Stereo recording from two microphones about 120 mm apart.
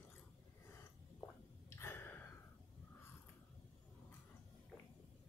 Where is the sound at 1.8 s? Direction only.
20° left (ahead or behind).